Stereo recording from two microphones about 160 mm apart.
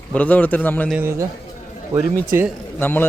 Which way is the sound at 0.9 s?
10° right (ahead or behind).